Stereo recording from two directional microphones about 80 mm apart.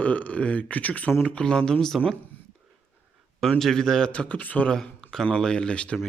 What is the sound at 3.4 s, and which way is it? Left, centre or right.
Speech, centre.